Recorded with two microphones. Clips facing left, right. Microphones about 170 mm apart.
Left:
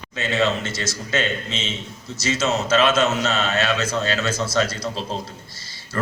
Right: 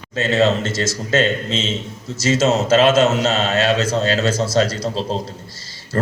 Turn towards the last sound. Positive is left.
turn(degrees=-40)  # may be behind; listen again after turning